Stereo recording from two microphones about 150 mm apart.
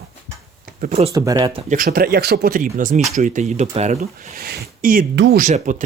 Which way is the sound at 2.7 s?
55° right (ahead or behind).